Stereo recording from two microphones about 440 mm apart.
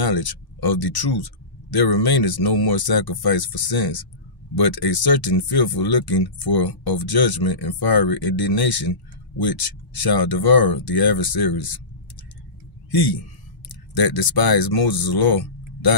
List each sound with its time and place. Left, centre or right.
0.0 s speech: left